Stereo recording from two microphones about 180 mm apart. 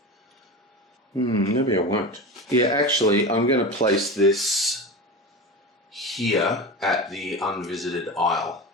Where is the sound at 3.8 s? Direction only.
50° left (ahead or behind).